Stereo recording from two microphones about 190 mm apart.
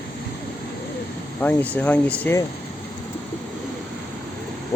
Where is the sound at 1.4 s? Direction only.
10° left (ahead or behind).